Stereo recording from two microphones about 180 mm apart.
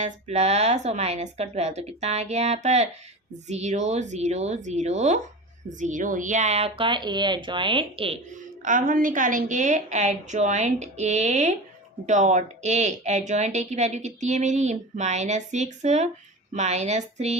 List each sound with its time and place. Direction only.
0.0 s a woman's voice: 35° right (ahead or behind)
8.6 s a woman's voice: 50° right (ahead or behind)